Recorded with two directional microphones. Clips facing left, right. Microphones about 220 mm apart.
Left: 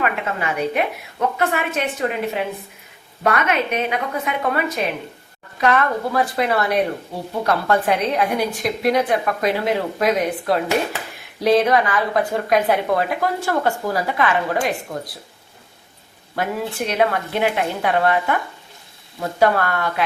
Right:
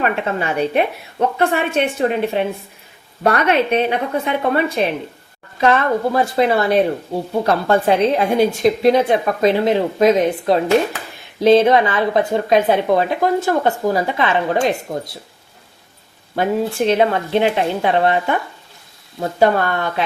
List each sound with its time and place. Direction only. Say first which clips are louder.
0.0 s speech: right 3 dB; 30° right (ahead or behind)
16.3 s speech: right 6 dB; 25° right (ahead or behind)